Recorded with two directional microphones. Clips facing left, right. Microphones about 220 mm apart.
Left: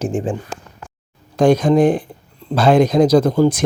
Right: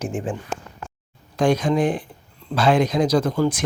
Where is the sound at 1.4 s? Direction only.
40° left (ahead or behind).